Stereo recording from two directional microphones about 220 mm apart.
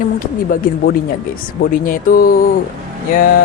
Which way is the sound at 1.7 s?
40° left (ahead or behind).